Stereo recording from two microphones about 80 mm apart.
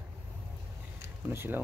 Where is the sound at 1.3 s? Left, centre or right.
Right.